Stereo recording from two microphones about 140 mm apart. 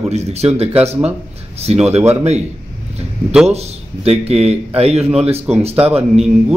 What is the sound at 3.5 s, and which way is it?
Speech, 50° right (ahead or behind).